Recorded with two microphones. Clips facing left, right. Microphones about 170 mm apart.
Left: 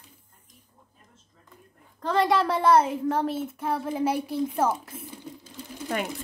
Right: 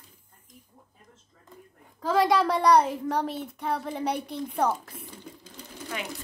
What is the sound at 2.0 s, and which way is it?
A woman's voice, centre (ahead or behind).